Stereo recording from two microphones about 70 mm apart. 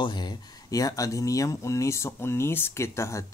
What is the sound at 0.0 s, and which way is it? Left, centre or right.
Speech, left.